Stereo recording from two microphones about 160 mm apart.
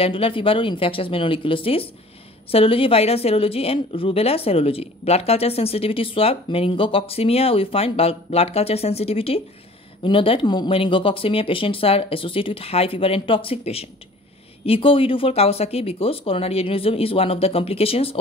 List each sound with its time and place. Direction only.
0.0 s speech: 35° left (ahead or behind)